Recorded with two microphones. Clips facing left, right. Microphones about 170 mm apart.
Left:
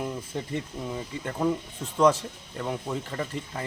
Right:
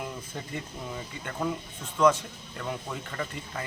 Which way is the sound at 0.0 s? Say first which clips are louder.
Left 5 dB; 30° left (ahead or behind).